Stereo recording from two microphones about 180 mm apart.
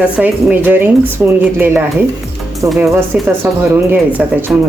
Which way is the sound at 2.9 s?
10° right (ahead or behind).